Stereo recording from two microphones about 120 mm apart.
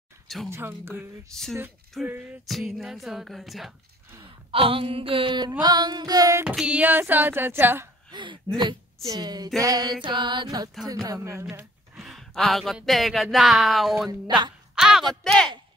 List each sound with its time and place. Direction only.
0.5 s speech: 20° right (ahead or behind)
1.3 s music: 5° left (ahead or behind)
4.2 s speech: 50° right (ahead or behind)
5.6 s music: 35° right (ahead or behind)
6.4 s speech: 10° right (ahead or behind)
8.1 s speech: 40° right (ahead or behind)
9.0 s music: 35° right (ahead or behind)
11.1 s a sound: 25° right (ahead or behind)
11.9 s speech: 5° right (ahead or behind)
14.2 s music: 40° right (ahead or behind)
14.8 s music: 5° right (ahead or behind)